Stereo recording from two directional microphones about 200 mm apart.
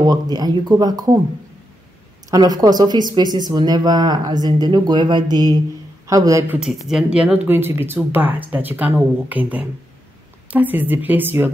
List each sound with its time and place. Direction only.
0.0 s speech: 20° right (ahead or behind)
2.3 s speech: 20° right (ahead or behind)
6.6 s speech: centre (ahead or behind)